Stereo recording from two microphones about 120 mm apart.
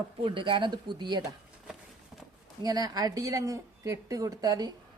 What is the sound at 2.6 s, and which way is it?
A man's voice, 30° right (ahead or behind).